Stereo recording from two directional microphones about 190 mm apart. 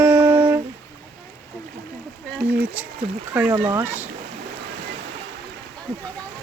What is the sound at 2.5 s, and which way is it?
Speech, 10° right (ahead or behind).